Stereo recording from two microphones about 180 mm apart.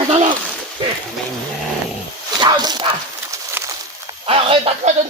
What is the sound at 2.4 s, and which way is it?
Speech, 25° right (ahead or behind).